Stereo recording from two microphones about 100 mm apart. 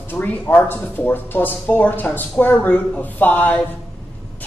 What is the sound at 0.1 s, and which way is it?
A man's voice, 20° left (ahead or behind).